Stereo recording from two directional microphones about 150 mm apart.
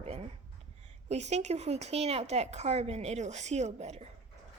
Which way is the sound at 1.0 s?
50° right (ahead or behind).